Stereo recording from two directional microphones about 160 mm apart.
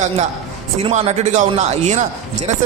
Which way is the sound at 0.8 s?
40° right (ahead or behind).